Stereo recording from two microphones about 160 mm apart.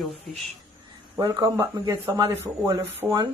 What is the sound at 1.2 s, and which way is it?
Speech, 25° right (ahead or behind).